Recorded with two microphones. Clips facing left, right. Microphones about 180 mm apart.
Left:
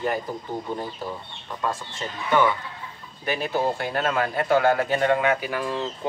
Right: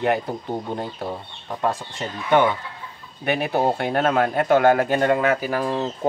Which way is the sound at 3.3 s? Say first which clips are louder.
Right 4 dB; 65° right (ahead or behind).